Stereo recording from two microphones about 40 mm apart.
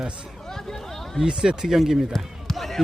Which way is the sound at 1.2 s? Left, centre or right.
Right.